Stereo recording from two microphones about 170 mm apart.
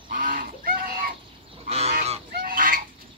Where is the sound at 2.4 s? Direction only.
55° right (ahead or behind).